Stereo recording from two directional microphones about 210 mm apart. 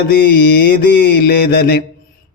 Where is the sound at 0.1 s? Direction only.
50° left (ahead or behind).